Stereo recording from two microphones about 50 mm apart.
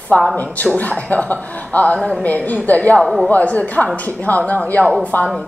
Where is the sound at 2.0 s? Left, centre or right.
Centre.